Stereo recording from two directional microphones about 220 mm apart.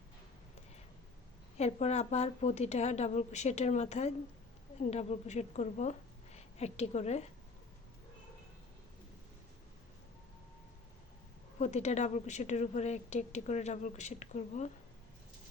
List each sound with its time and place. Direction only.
1.5 s a woman's voice: 30° left (ahead or behind)
11.6 s a woman's voice: 30° left (ahead or behind)